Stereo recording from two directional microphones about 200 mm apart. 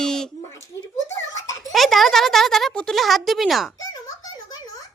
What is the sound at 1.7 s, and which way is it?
A woman's voice, centre (ahead or behind).